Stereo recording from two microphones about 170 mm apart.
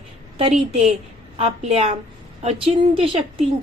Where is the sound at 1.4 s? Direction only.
35° right (ahead or behind).